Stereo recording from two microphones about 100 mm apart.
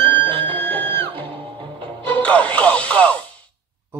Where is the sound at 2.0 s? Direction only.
15° left (ahead or behind).